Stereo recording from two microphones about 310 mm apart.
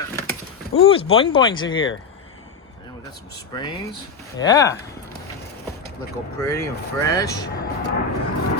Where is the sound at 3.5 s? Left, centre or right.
Centre.